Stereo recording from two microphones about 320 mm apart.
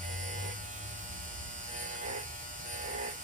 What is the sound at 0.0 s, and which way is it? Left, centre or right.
Electric shaver, right.